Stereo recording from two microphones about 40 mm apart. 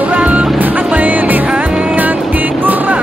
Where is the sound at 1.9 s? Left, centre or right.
Right.